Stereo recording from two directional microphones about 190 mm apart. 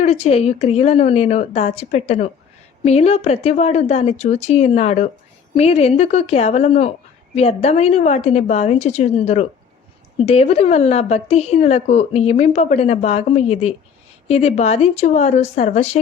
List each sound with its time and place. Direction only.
0.0 s a woman's voice: 35° left (ahead or behind)